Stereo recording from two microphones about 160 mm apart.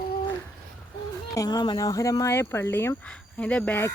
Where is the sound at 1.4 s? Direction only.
25° left (ahead or behind).